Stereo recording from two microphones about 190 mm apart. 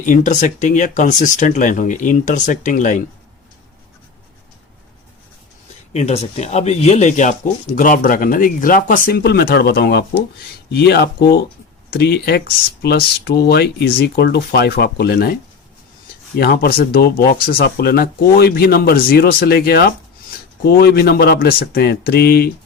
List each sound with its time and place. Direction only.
0.0 s speech: 40° left (ahead or behind)
5.9 s speech: 35° left (ahead or behind); by 15.4 s 55° left (ahead or behind)
16.4 s speech: 55° left (ahead or behind)